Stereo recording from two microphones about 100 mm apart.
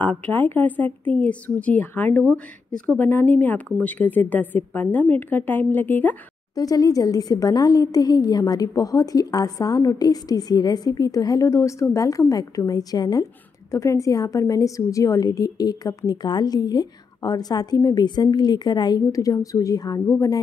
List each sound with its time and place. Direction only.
0.0 s a woman's voice: 20° left (ahead or behind)
6.5 s a woman's voice: 35° left (ahead or behind)